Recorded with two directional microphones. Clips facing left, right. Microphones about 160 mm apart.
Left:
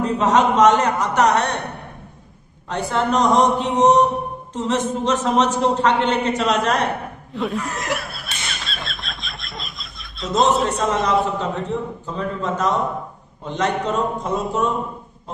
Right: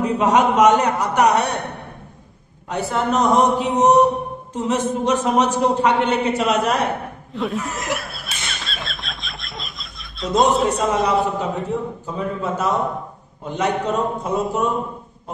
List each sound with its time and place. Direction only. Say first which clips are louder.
0.0 s a man's voice: even; 10° right (ahead or behind)
2.7 s a man's voice: even; 5° right (ahead or behind)
7.3 s snicker: even; centre (ahead or behind)
10.5 s a man's voice: right 1 dB; centre (ahead or behind)